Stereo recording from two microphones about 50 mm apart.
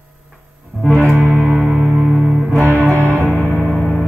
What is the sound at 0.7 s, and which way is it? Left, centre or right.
Music, right.